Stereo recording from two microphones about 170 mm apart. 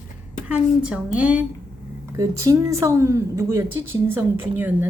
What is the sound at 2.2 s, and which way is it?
A woman's voice, 20° right (ahead or behind).